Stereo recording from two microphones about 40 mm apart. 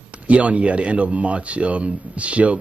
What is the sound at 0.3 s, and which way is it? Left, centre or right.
A man's voice, right.